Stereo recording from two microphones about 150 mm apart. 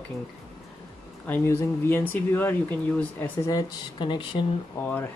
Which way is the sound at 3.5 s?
30° left (ahead or behind).